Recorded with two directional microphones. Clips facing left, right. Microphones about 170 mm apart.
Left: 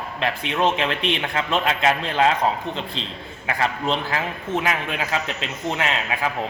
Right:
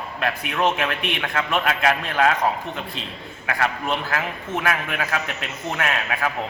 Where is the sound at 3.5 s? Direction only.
25° left (ahead or behind).